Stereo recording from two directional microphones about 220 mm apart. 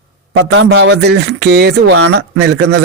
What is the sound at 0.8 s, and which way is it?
Speech, 50° right (ahead or behind).